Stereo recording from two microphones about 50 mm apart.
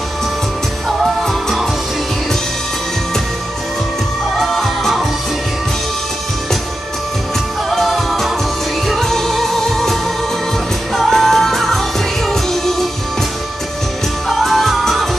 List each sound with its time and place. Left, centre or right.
4.4 s music: centre
7.7 s music: centre
11.0 s music: centre
14.4 s music: centre